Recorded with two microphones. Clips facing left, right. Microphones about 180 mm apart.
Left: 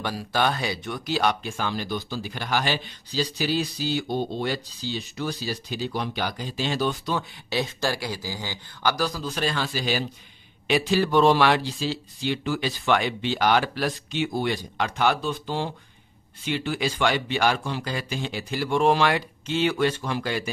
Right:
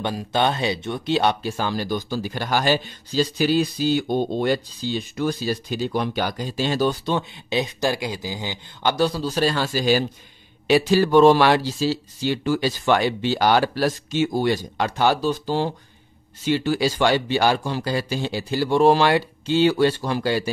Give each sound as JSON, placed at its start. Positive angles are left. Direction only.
{"t": 0.0, "sound": "speech", "side_deg": -20}
{"t": 7.1, "sound": "a man's voice", "side_deg": -20}